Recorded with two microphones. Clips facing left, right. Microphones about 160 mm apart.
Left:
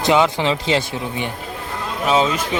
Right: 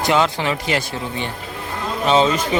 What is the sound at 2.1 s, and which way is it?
Speech, 5° left (ahead or behind).